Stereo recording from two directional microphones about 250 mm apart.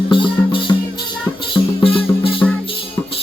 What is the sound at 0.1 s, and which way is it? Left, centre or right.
Music, centre.